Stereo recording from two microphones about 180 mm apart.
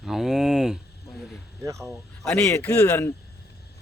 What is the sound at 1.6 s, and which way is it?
Speech, 15° right (ahead or behind).